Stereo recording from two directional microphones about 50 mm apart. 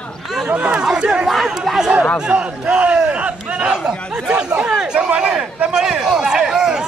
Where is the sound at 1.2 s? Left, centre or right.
Centre.